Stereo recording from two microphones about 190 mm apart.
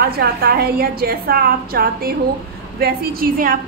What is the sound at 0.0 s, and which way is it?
A woman's voice, 55° right (ahead or behind).